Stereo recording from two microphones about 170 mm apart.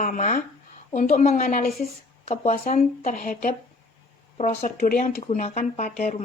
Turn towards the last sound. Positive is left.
turn(degrees=40)  # may be behind; listen again after turning